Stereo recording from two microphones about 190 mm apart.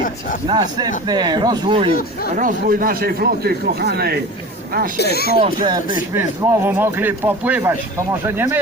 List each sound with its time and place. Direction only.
0.4 s speech: 20° right (ahead or behind)
2.3 s speech: 45° right (ahead or behind)
4.9 s speech: 55° left (ahead or behind)
5.4 s speech: 20° right (ahead or behind)